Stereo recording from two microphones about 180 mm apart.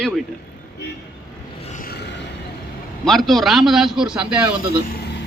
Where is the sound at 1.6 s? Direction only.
40° left (ahead or behind).